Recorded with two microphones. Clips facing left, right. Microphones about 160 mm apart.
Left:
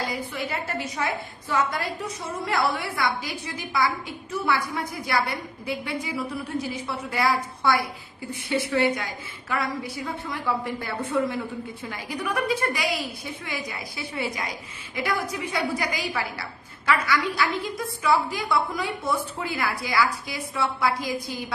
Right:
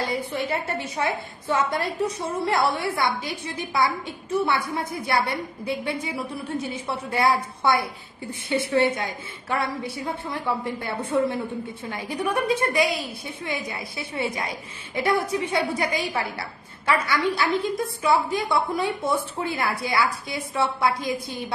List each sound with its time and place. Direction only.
0.0 s a woman's voice: 30° right (ahead or behind)